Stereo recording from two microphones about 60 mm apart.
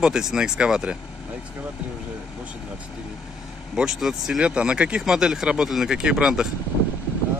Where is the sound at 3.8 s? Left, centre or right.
Centre.